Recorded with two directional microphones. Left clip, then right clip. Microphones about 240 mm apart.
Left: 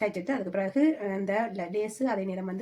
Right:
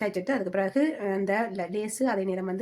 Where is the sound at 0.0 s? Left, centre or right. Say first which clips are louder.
Right 2 dB; right.